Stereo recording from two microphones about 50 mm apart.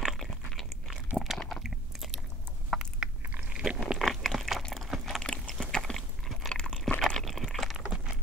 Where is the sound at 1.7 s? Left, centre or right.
Centre.